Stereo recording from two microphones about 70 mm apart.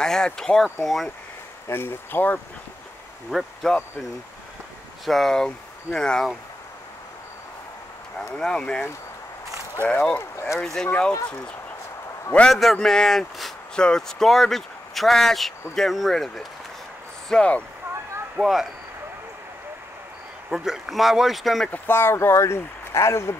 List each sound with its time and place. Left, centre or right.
0.0 s speech: centre
1.7 s speech: left
3.3 s speech: centre
5.0 s speech: centre
8.4 s speech: centre
9.8 s speech: centre
12.4 s speech: centre
17.3 s speech: centre
18.4 s speech: centre
20.4 s speech: centre
21.7 s speech: left